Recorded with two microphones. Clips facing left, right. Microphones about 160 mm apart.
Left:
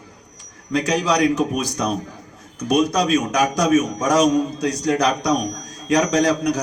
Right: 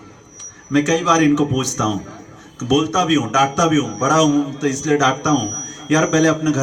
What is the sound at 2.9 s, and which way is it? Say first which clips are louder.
A man's voice: right 2 dB; 30° left (ahead or behind).